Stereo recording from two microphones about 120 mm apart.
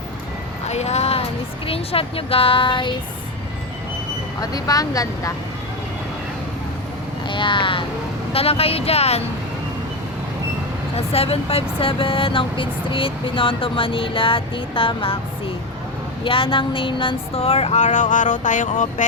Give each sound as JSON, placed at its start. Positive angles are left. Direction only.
{"t": 0.7, "sound": "vehicle", "side_deg": 65}
{"t": 1.6, "sound": "speech", "side_deg": 55}
{"t": 4.4, "sound": "speech", "side_deg": 30}
{"t": 7.3, "sound": "speech", "side_deg": 40}
{"t": 8.3, "sound": "a sound", "side_deg": 55}
{"t": 10.9, "sound": "speech", "side_deg": 55}
{"t": 16.2, "sound": "a sound", "side_deg": 45}